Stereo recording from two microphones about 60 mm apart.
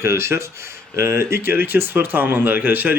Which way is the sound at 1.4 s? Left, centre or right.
Right.